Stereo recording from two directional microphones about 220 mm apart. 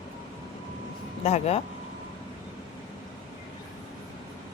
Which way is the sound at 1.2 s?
30° left (ahead or behind).